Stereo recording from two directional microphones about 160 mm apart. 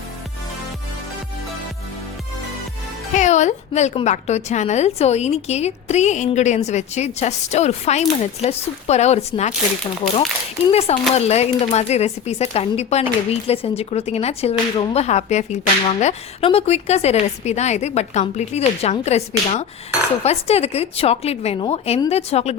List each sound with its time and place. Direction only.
3.2 s speech: 45° left (ahead or behind)
10.7 s a woman's voice: 40° left (ahead or behind)